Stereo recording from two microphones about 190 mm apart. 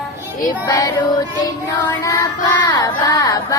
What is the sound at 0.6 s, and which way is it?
Child singing, 20° left (ahead or behind).